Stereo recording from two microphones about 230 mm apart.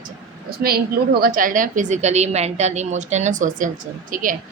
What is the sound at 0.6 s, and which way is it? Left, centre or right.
A woman's voice, right.